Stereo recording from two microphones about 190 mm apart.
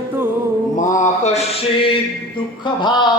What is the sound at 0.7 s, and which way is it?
Mantra, 40° left (ahead or behind).